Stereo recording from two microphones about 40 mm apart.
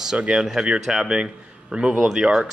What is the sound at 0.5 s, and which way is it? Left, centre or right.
A man's voice, centre.